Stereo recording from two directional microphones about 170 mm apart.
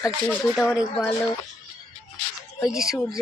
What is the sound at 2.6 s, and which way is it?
Speech, centre (ahead or behind).